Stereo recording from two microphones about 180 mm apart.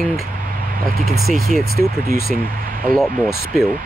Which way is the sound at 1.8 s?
15° left (ahead or behind).